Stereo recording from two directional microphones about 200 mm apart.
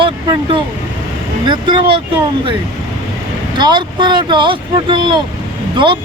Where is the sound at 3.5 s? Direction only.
20° right (ahead or behind).